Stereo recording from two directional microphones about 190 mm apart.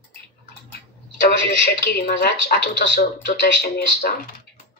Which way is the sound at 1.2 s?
65° left (ahead or behind).